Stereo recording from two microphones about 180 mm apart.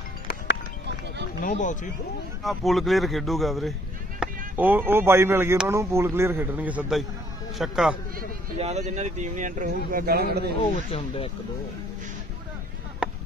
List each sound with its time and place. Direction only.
1.4 s speech: 45° left (ahead or behind)
2.4 s speech: centre (ahead or behind)
8.5 s speech: 35° right (ahead or behind); by 10.5 s 60° right (ahead or behind)
10.9 s speech: 35° left (ahead or behind)